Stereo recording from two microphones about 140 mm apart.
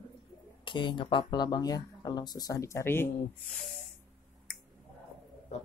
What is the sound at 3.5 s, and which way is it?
Snake, centre (ahead or behind).